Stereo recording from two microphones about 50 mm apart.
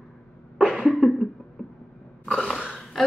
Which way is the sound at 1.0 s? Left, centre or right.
Right.